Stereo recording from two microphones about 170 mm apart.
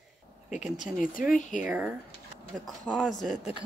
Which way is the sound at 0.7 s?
50° left (ahead or behind).